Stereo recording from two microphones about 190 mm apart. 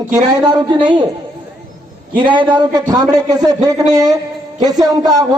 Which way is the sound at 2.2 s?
25° right (ahead or behind).